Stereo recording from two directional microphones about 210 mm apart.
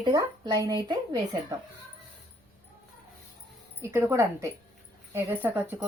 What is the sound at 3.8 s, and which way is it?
Speech, 10° right (ahead or behind).